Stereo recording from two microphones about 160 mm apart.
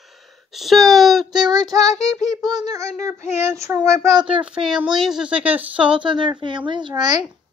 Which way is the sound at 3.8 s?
20° right (ahead or behind).